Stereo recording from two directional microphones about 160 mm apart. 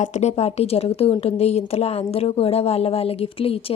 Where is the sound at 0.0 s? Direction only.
45° left (ahead or behind).